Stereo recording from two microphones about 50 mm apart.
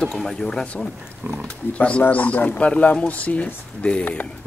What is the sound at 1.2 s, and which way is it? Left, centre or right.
Speech, right.